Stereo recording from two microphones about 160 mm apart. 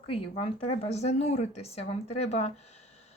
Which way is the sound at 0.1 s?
35° left (ahead or behind).